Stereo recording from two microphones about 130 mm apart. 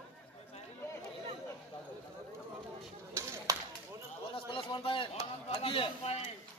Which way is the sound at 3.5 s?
25° right (ahead or behind).